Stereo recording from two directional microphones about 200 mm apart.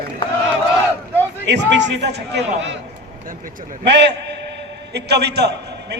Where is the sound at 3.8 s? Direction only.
60° right (ahead or behind).